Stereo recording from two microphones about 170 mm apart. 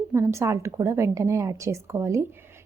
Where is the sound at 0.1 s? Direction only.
15° right (ahead or behind).